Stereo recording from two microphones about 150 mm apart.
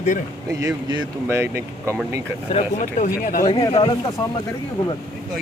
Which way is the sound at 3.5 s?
30° left (ahead or behind).